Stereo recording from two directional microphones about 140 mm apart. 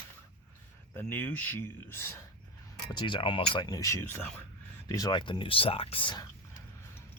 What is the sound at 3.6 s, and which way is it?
Speech, 25° left (ahead or behind).